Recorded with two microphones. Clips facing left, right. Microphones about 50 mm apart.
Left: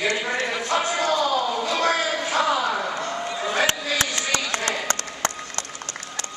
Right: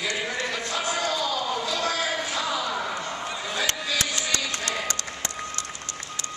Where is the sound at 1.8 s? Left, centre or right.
Left.